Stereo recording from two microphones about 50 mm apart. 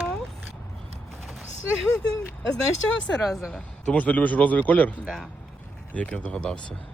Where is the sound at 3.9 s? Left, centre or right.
Left.